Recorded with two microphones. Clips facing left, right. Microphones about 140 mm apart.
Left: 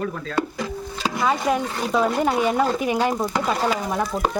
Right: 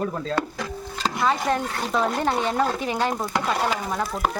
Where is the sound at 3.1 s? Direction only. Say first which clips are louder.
Left 2 dB; centre (ahead or behind).